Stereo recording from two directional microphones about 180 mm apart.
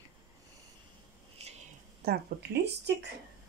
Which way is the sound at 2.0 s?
60° right (ahead or behind).